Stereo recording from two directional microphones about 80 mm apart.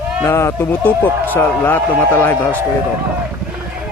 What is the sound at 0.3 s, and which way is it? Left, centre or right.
Speech, left.